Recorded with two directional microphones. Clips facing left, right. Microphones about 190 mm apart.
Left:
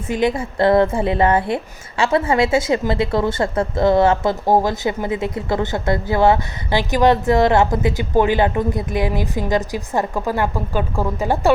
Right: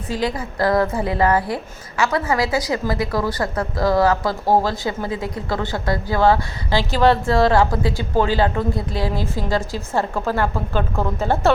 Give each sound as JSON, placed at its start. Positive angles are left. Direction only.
{"t": 0.1, "sound": "a woman's voice", "side_deg": 20}